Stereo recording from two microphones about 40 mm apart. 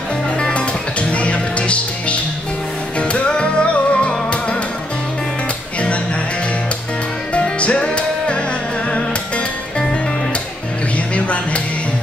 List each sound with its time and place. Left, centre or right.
0.4 s music: left
7.3 s music: left
11.1 s music: left